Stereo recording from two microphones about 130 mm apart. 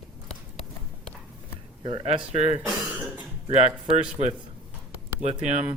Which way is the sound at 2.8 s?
10° right (ahead or behind).